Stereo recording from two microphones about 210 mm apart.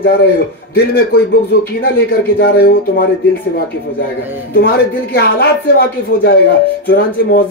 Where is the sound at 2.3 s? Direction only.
45° left (ahead or behind).